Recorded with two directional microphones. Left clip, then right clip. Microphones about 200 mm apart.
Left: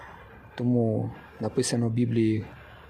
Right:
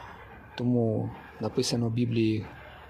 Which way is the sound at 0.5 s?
15° left (ahead or behind).